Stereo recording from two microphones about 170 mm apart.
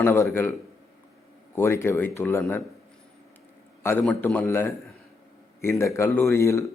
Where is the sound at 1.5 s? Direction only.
15° left (ahead or behind).